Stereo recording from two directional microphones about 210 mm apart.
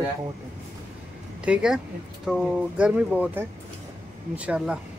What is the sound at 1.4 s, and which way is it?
Speech, 5° right (ahead or behind).